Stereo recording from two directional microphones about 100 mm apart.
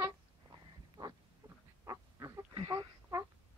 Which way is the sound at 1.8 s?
35° right (ahead or behind).